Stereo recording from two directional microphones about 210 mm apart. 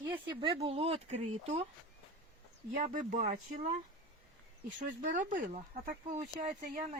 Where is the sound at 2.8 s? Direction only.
35° right (ahead or behind).